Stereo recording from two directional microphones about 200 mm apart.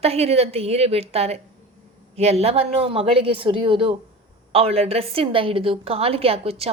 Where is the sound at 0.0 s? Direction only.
30° right (ahead or behind).